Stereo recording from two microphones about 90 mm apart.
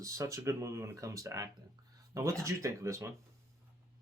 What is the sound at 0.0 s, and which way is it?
Speech, 35° right (ahead or behind).